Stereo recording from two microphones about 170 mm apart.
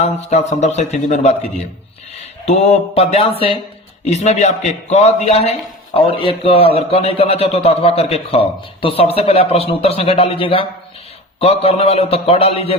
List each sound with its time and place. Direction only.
0.0 s a man's voice: 40° left (ahead or behind)
2.5 s a man's voice: 40° left (ahead or behind)